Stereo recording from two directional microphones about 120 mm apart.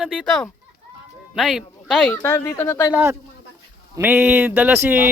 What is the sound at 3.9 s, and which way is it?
Speech, 15° right (ahead or behind).